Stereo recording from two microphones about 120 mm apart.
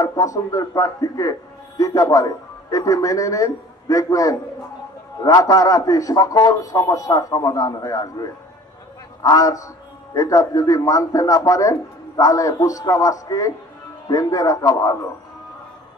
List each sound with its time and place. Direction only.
0.0 s a man's voice: 30° left (ahead or behind)